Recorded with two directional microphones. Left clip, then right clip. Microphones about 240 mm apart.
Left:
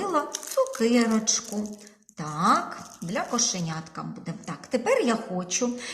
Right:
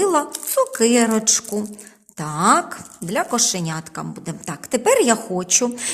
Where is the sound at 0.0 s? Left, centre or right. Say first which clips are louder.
Right 8 dB; right.